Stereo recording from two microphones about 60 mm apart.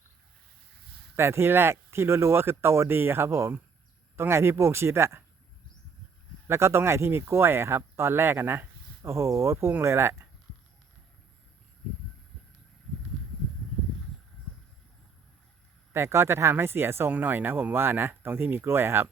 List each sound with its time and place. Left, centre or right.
1.1 s speech: right
6.5 s speech: right
9.0 s speech: right
15.9 s speech: right
17.1 s speech: right